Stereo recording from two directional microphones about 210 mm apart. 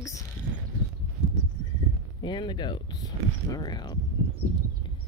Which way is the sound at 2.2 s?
20° left (ahead or behind).